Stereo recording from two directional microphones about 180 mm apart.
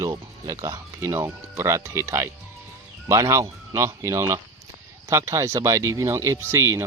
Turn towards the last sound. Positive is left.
turn(degrees=-15)  # may be behind; listen again after turning